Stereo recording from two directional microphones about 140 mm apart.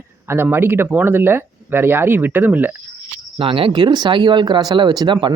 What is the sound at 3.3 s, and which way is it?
Speech, 40° right (ahead or behind).